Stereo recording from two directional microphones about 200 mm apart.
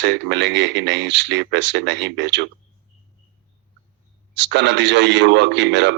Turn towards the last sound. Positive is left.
turn(degrees=-60)  # may be behind; listen again after turning